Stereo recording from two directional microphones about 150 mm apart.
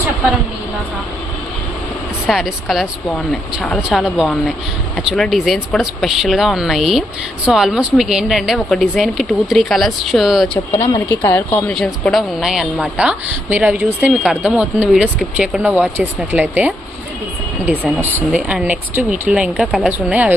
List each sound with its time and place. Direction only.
2.3 s speech: centre (ahead or behind)
10.8 s speech: 20° left (ahead or behind)
11.7 s speech: centre (ahead or behind)
18.0 s speech: 10° right (ahead or behind)